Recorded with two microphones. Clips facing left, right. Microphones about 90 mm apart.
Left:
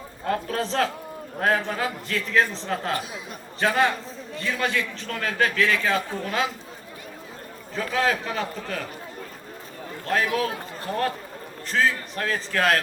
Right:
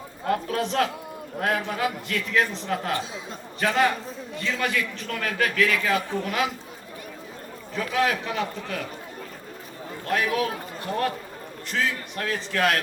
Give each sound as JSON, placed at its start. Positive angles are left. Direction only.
{"t": 0.3, "sound": "a man's voice", "side_deg": 35}
{"t": 7.8, "sound": "a man's voice", "side_deg": 35}
{"t": 10.3, "sound": "a man's voice", "side_deg": 35}